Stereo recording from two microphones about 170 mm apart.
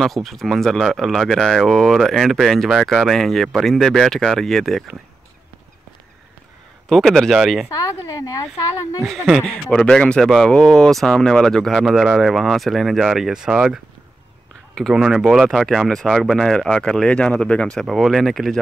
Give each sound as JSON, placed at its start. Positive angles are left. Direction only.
{"t": 0.0, "sound": "speech", "side_deg": 0}
{"t": 6.9, "sound": "speech", "side_deg": 0}
{"t": 8.0, "sound": "speech", "side_deg": 20}
{"t": 9.0, "sound": "speech", "side_deg": 0}
{"t": 14.8, "sound": "speech", "side_deg": 0}